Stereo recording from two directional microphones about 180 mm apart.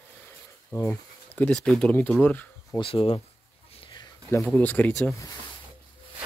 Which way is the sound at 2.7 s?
30° left (ahead or behind).